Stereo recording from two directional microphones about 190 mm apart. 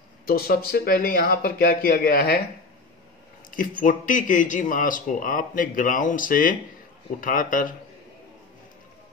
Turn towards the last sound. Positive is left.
turn(degrees=45)  # may be behind; listen again after turning